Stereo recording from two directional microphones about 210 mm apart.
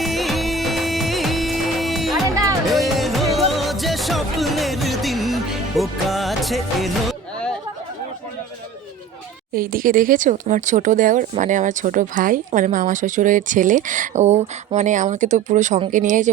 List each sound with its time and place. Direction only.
0.0 s music: centre (ahead or behind)
2.2 s music: 15° right (ahead or behind)
2.6 s music: centre (ahead or behind)
9.6 s speech: 40° right (ahead or behind)